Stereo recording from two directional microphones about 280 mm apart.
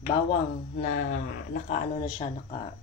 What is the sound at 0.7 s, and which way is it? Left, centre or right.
Speech, left.